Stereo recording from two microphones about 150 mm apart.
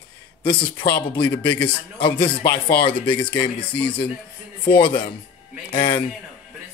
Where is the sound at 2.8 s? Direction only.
35° left (ahead or behind).